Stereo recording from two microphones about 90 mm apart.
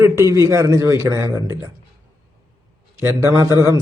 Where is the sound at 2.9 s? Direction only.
35° right (ahead or behind).